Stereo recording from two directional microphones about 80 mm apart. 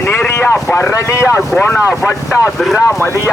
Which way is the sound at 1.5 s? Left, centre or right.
Left.